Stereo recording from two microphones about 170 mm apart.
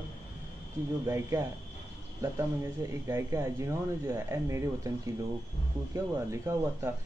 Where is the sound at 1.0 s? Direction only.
15° right (ahead or behind).